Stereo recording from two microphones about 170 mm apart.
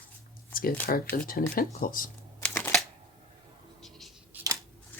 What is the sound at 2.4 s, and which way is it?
Shuffling cards, 5° left (ahead or behind).